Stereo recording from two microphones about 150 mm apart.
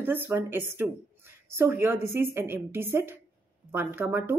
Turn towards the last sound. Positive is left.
turn(degrees=-15)  # may be behind; listen again after turning